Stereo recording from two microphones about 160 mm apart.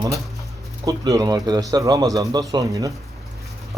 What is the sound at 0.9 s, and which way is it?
Speech, 20° right (ahead or behind).